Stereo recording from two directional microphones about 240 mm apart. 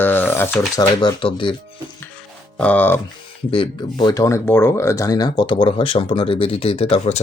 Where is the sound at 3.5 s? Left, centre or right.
Left.